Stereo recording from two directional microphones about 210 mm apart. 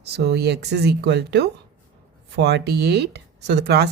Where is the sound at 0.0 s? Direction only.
50° right (ahead or behind).